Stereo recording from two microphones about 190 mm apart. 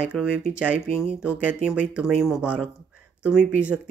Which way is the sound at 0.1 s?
5° left (ahead or behind).